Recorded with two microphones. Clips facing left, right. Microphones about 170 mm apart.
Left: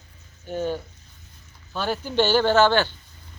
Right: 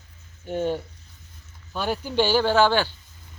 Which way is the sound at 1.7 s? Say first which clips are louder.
Even; 10° right (ahead or behind).